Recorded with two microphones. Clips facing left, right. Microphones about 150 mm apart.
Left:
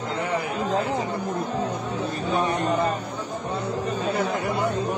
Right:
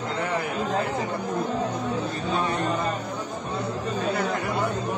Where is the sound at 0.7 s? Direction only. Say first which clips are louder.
Left 1 dB; 25° left (ahead or behind).